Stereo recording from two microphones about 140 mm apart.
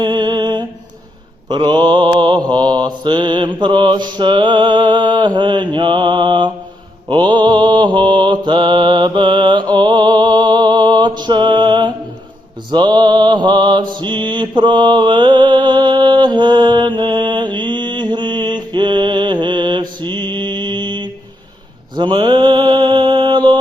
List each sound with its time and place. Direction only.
0.0 s music: 30° right (ahead or behind)
1.5 s mantra: 35° right (ahead or behind)